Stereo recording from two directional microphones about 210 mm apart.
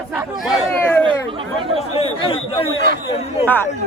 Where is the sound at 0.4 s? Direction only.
Centre (ahead or behind).